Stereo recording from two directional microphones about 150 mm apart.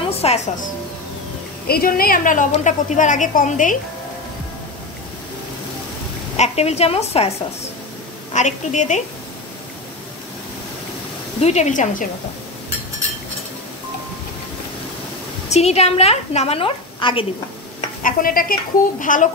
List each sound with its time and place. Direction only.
0.1 s music: 45° left (ahead or behind)
1.7 s a woman's voice: 85° left; by 3.7 s 60° left (ahead or behind)
6.3 s a woman's voice: 45° left (ahead or behind)
11.4 s a woman's voice: 50° left (ahead or behind)
15.5 s a woman's voice: 45° left (ahead or behind)
18.0 s a woman's voice: 70° left (ahead or behind)